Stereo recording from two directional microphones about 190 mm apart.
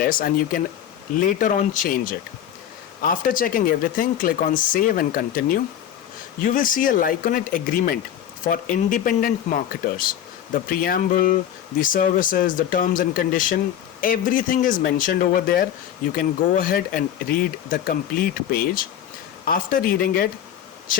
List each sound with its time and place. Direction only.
0.0 s speech: 50° left (ahead or behind)